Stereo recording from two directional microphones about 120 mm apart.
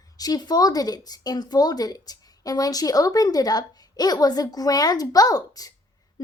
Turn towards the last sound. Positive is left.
turn(degrees=30)  # may be behind; listen again after turning